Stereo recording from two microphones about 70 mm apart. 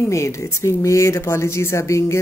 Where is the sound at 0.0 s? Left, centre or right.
Left.